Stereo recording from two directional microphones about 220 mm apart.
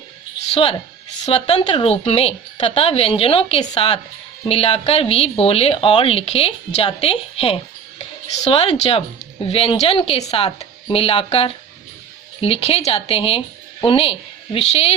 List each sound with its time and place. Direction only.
0.5 s a woman's voice: 25° left (ahead or behind)